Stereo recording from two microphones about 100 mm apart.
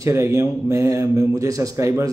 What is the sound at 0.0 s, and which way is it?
A man's voice, 30° right (ahead or behind).